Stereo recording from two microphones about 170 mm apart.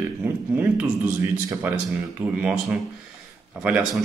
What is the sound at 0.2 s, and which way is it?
Speech, 10° right (ahead or behind).